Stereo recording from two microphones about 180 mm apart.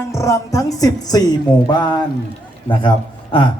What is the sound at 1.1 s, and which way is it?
Speech, 20° left (ahead or behind).